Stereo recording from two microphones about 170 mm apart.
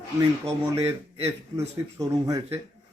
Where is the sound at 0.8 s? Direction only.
35° right (ahead or behind).